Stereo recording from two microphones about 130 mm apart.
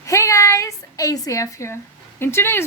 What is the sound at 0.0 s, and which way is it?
A woman's voice, 25° left (ahead or behind).